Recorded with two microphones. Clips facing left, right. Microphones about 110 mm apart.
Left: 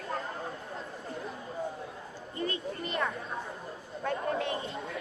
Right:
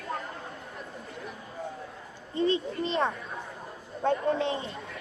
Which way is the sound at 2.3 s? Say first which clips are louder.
Right 8 dB; 25° right (ahead or behind).